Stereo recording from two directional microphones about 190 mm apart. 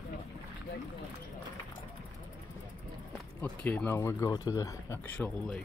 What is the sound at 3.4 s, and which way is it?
Speech, 10° left (ahead or behind).